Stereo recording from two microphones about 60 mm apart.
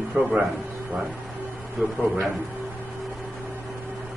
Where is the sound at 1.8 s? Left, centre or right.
Right.